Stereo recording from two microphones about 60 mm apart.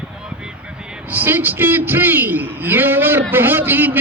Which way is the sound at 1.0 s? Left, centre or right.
Right.